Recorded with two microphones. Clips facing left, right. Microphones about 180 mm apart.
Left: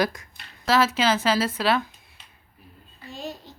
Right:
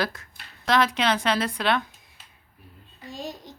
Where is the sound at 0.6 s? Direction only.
5° left (ahead or behind).